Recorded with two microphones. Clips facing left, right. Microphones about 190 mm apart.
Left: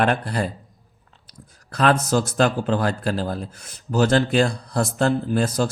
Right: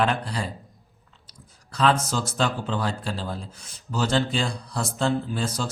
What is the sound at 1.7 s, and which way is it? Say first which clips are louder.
A man's voice: left 4 dB; 60° left (ahead or behind).